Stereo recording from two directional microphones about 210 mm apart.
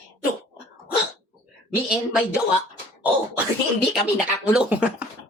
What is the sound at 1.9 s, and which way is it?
Speech, 5° right (ahead or behind).